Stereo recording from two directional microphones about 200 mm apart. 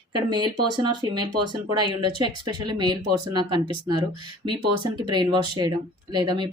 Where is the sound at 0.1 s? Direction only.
20° right (ahead or behind).